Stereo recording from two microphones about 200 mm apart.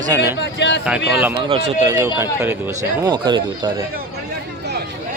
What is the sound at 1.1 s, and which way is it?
Speech, 5° right (ahead or behind).